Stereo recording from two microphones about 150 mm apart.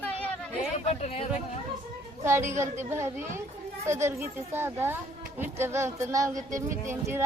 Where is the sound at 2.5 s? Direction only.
15° right (ahead or behind).